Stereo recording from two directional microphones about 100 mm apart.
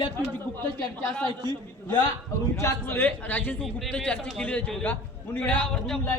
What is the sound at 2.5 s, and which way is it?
A man's voice, 30° left (ahead or behind).